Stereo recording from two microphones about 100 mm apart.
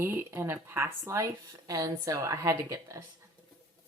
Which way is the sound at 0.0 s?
25° right (ahead or behind).